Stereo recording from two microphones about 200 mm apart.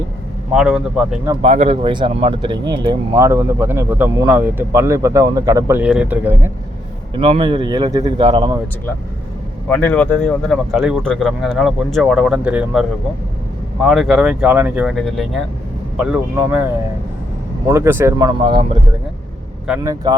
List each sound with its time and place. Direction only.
0.5 s speech: 5° right (ahead or behind)
1.4 s speech: 30° right (ahead or behind); by 6.5 s 10° right (ahead or behind)
7.2 s speech: 25° right (ahead or behind)
9.6 s speech: 10° left (ahead or behind)
13.8 s speech: centre (ahead or behind)
17.7 s speech: 10° right (ahead or behind)
19.6 s speech: 5° right (ahead or behind)